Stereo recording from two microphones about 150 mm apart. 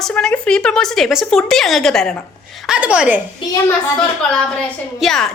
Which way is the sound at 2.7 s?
10° right (ahead or behind).